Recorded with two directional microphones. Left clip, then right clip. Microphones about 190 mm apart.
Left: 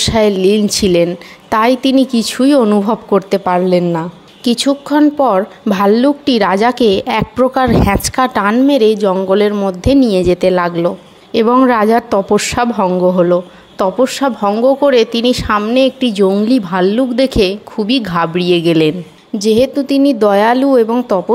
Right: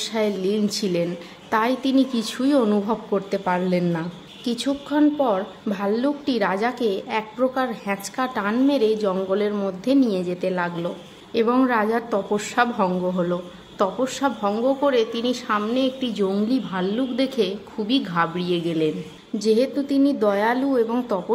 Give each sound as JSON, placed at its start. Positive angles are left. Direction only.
{"t": 0.0, "sound": "a woman's voice", "side_deg": 40}
{"t": 3.8, "sound": "a woman's voice", "side_deg": 30}
{"t": 4.5, "sound": "a woman's voice", "side_deg": 40}
{"t": 19.3, "sound": "a woman's voice", "side_deg": 35}